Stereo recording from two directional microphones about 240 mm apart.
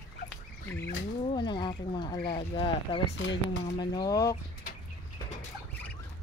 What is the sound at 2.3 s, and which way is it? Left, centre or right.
Speech, left.